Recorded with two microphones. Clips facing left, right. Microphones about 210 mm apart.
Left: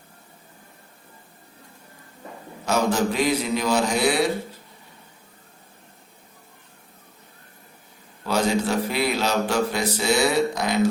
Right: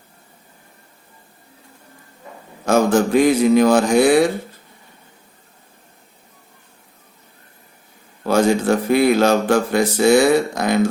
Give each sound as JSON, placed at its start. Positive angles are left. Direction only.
{"t": 2.6, "sound": "a man's voice", "side_deg": -50}
{"t": 8.2, "sound": "a man's voice", "side_deg": -50}